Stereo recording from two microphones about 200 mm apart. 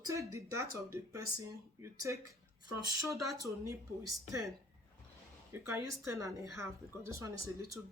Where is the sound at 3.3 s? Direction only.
15° right (ahead or behind).